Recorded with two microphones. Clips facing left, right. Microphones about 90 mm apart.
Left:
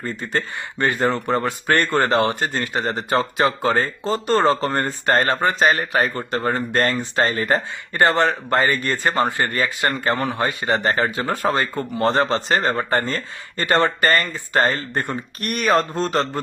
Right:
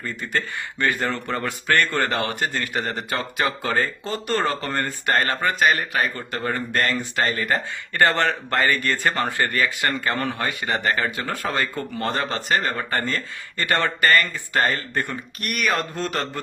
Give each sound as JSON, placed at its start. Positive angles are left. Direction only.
{"t": 0.2, "sound": "a man's voice", "side_deg": 20}
{"t": 8.0, "sound": "a man's voice", "side_deg": 20}
{"t": 15.4, "sound": "a man's voice", "side_deg": 35}